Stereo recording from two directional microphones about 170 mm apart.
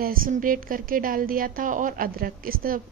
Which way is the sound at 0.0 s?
55° right (ahead or behind).